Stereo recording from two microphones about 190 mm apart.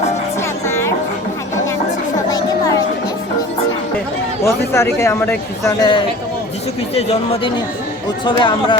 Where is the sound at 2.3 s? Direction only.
20° left (ahead or behind).